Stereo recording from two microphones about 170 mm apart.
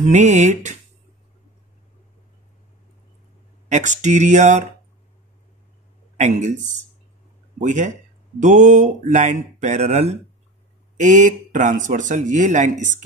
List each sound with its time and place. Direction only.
0.0 s a man's voice: 45° right (ahead or behind)
3.6 s a man's voice: 45° right (ahead or behind)
6.1 s a man's voice: 45° right (ahead or behind)